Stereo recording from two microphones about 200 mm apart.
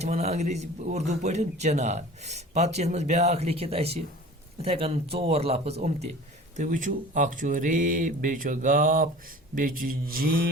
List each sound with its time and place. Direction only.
0.0 s a man's voice: 35° right (ahead or behind)
9.6 s mantra: 45° right (ahead or behind)